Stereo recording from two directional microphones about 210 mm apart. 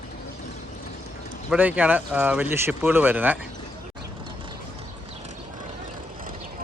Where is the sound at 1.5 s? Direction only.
5° right (ahead or behind).